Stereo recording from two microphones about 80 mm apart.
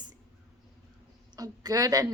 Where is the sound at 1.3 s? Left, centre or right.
Right.